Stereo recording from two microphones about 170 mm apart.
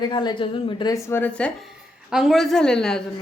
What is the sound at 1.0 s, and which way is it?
Speech, 10° left (ahead or behind).